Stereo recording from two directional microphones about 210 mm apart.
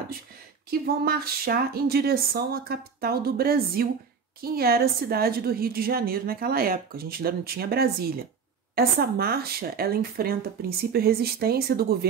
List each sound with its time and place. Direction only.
0.7 s a woman's voice: 45° right (ahead or behind)